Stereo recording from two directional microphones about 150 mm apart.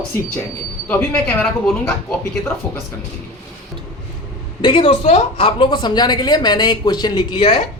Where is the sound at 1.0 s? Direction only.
10° left (ahead or behind).